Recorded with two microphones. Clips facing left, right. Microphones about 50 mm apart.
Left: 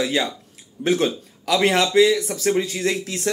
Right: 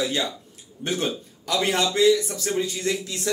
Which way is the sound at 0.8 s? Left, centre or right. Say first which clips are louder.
Left 6 dB; left.